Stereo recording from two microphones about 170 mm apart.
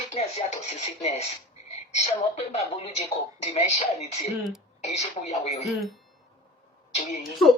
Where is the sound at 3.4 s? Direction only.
40° left (ahead or behind).